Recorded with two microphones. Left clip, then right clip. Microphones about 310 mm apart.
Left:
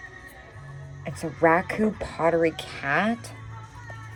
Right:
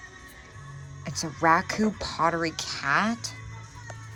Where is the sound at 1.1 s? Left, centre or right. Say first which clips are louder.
Left 1 dB; right.